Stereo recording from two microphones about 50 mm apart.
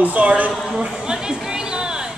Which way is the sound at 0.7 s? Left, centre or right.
Centre.